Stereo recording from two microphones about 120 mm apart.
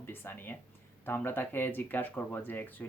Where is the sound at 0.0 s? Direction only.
20° left (ahead or behind).